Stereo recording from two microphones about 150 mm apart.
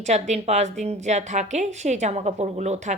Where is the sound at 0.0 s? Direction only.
50° right (ahead or behind).